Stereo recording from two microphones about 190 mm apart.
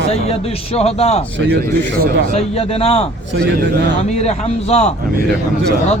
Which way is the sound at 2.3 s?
30° left (ahead or behind).